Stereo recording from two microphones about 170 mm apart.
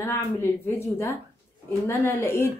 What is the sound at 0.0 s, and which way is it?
Speech, 15° left (ahead or behind).